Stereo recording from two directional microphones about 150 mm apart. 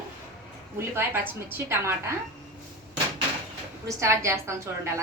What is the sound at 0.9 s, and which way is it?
A woman's voice, 15° right (ahead or behind).